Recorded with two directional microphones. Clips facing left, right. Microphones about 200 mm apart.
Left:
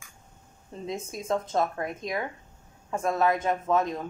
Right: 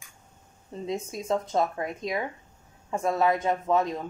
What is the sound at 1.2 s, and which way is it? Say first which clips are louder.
Speech: even; 15° right (ahead or behind).